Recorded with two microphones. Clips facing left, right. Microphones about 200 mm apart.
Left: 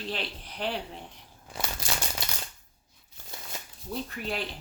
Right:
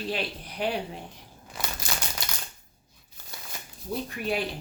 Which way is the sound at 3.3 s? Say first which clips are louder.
Left 1 dB; 25° left (ahead or behind).